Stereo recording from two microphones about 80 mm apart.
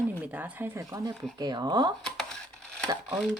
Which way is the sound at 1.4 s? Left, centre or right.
Right.